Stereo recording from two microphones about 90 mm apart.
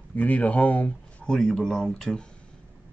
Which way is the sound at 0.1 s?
15° left (ahead or behind).